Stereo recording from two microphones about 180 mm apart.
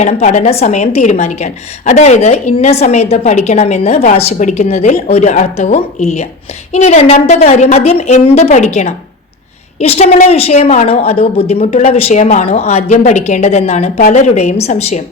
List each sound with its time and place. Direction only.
0.0 s a woman's voice: 40° left (ahead or behind)